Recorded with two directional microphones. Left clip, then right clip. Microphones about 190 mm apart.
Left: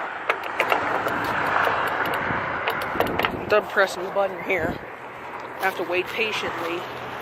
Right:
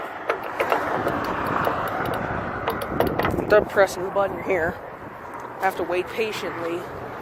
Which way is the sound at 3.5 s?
10° right (ahead or behind).